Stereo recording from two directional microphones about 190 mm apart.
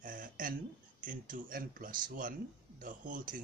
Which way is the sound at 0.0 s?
45° right (ahead or behind).